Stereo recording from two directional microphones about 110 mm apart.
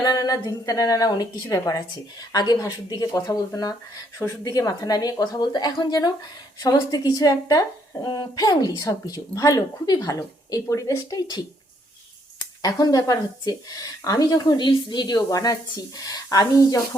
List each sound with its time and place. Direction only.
0.0 s speech: 35° left (ahead or behind)
12.6 s speech: 35° left (ahead or behind)